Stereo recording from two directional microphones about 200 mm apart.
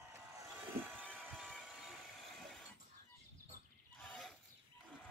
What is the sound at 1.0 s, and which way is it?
Vehicle, 5° left (ahead or behind).